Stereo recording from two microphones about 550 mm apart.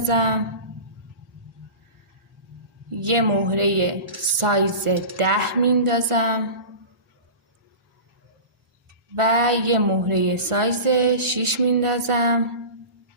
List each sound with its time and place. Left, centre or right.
0.1 s speech: right
3.0 s speech: right
9.1 s speech: right